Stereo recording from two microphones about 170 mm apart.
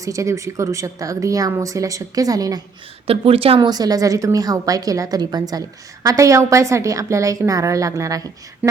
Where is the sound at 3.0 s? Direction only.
35° right (ahead or behind).